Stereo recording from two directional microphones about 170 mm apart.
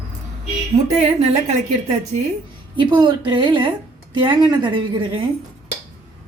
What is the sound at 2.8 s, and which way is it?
A woman's voice, 25° right (ahead or behind).